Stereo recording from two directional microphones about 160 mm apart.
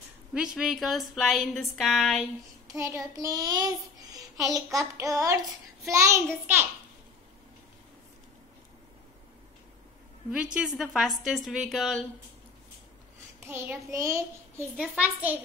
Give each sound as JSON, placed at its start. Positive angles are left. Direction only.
{"t": 0.3, "sound": "a woman's voice", "side_deg": -5}
{"t": 2.7, "sound": "child singing", "side_deg": -20}
{"t": 5.9, "sound": "a child's voice", "side_deg": -20}
{"t": 10.3, "sound": "a woman's voice", "side_deg": -5}
{"t": 13.4, "sound": "a child's voice", "side_deg": -15}